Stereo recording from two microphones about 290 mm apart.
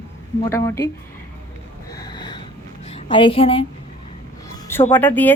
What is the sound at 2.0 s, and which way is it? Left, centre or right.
Snort, centre.